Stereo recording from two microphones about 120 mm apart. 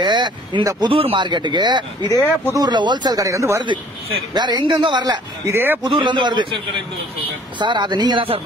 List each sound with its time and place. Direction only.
0.0 s a sound: 40° right (ahead or behind)
0.7 s speech: 35° right (ahead or behind)
0.9 s speech: 45° right (ahead or behind); by 3.6 s 25° right (ahead or behind)
3.6 s speech: 40° right (ahead or behind)
5.5 s speech: 15° right (ahead or behind)
5.9 s a man's voice: 45° right (ahead or behind)